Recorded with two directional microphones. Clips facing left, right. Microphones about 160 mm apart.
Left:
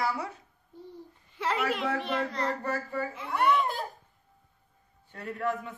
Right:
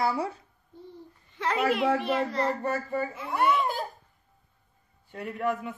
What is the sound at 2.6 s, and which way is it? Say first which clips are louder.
Speech: right 3 dB; 20° right (ahead or behind).